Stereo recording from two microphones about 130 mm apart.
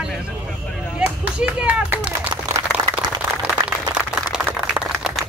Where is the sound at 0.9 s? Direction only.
10° right (ahead or behind).